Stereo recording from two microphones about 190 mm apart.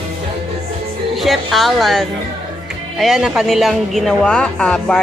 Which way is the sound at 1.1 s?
Centre (ahead or behind).